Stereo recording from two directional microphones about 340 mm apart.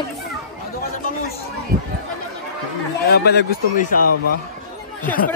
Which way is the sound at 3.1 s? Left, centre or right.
Left.